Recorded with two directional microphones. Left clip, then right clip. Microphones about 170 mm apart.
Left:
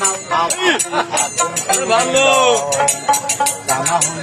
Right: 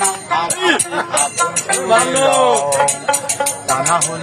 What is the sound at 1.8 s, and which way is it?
Music, 40° right (ahead or behind).